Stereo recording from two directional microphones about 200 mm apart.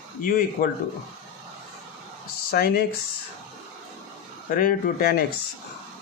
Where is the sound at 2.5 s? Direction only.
50° left (ahead or behind).